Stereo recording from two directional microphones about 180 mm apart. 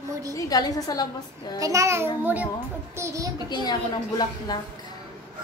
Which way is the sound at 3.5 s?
25° left (ahead or behind).